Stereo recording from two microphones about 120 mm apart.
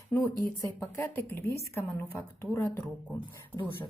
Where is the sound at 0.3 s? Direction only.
30° left (ahead or behind).